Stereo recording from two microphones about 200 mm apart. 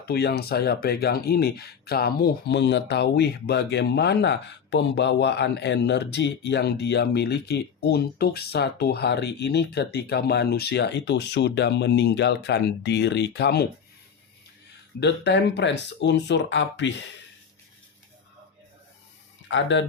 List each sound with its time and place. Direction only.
0.0 s speech: 50° left (ahead or behind)
15.0 s speech: 60° left (ahead or behind)
19.5 s speech: 65° left (ahead or behind)